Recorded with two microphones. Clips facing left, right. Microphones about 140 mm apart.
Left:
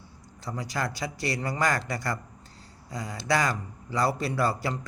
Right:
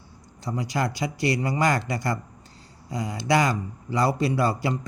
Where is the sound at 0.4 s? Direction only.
20° right (ahead or behind).